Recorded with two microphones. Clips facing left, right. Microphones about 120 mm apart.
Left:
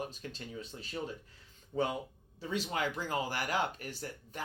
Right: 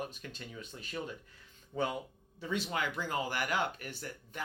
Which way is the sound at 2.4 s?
35° left (ahead or behind).